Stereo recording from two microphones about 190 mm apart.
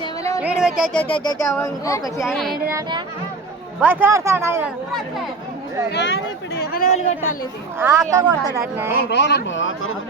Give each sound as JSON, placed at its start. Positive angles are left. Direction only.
{"t": 0.4, "sound": "a sound", "side_deg": -5}
{"t": 1.1, "sound": "speech", "side_deg": 20}
{"t": 2.1, "sound": "speech", "side_deg": 0}
{"t": 2.6, "sound": "a woman's voice", "side_deg": -15}
{"t": 5.9, "sound": "speech", "side_deg": 65}
{"t": 6.6, "sound": "speech", "side_deg": 45}
{"t": 7.8, "sound": "a woman's voice", "side_deg": -15}
{"t": 9.0, "sound": "speech", "side_deg": 65}